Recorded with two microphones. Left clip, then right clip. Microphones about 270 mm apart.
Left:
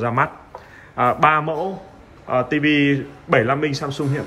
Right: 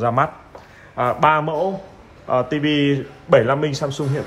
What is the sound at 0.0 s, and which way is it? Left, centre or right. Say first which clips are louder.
A man's voice: right 1 dB; centre.